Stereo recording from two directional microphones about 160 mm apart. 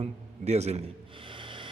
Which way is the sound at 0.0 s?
40° right (ahead or behind).